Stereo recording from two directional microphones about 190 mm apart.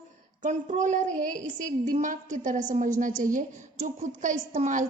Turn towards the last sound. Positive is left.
turn(degrees=-40)  # may be behind; listen again after turning